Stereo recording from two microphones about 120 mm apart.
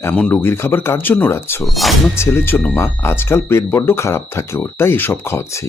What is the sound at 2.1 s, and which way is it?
Speech, 20° left (ahead or behind).